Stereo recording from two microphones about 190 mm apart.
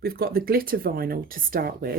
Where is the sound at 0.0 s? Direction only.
55° right (ahead or behind).